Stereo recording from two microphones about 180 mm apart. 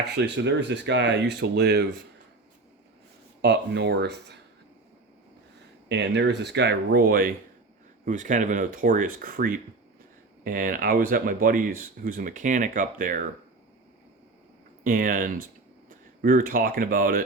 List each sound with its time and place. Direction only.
0.2 s speech: 75° right (ahead or behind)
3.4 s speech: 70° right (ahead or behind)
5.9 s speech: 75° right (ahead or behind); by 13.2 s 50° right (ahead or behind)
14.8 s speech: 50° right (ahead or behind)